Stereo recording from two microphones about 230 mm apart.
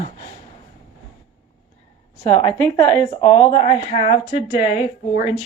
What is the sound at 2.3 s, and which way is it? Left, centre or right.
Speech, centre.